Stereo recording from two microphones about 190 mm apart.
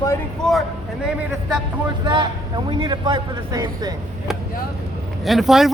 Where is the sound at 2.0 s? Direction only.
25° right (ahead or behind).